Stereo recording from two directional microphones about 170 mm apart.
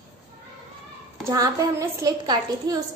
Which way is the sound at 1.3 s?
20° right (ahead or behind).